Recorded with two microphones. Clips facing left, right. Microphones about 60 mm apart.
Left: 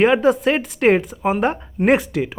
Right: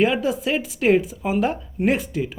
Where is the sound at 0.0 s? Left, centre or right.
Left.